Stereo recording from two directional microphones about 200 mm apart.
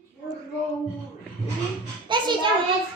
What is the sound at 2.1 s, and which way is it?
Speech, 25° right (ahead or behind).